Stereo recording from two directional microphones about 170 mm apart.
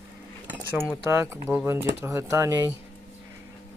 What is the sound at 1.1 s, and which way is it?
Speech, 15° right (ahead or behind).